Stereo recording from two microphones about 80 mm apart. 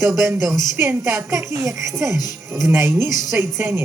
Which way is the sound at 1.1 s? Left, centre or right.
Right.